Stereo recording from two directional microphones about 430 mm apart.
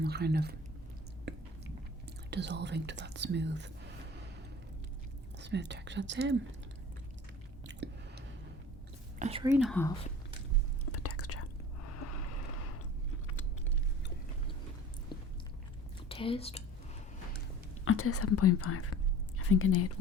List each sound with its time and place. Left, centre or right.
0.0 s speech: right
2.3 s speech: right
5.4 s speech: right
7.7 s chewing: right
9.1 s speech: centre
9.5 s speech: centre
10.9 s whispering: left
11.9 s a sound: left
16.0 s speech: centre
17.8 s speech: left